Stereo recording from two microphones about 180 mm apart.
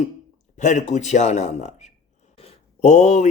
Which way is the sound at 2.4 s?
35° left (ahead or behind).